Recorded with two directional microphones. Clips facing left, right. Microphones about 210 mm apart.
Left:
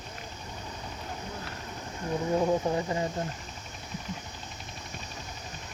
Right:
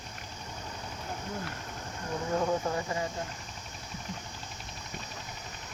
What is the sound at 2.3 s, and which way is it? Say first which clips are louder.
Speech: left 3 dB; 15° left (ahead or behind).